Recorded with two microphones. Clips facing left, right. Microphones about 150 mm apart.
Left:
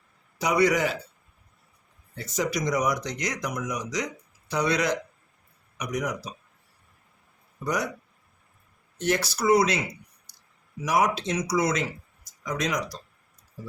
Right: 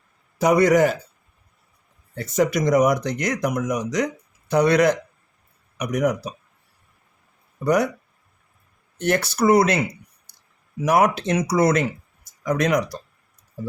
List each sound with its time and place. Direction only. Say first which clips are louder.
0.3 s a man's voice: right 7 dB; 50° right (ahead or behind)
2.1 s speech: right 8 dB; 55° right (ahead or behind)
7.6 s speech: right 9 dB; 60° right (ahead or behind)
9.0 s speech: right 5 dB; 55° right (ahead or behind)
10.8 s speech: right 6 dB; 55° right (ahead or behind)